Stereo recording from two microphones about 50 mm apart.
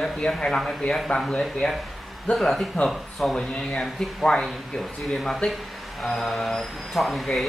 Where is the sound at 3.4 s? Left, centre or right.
Centre.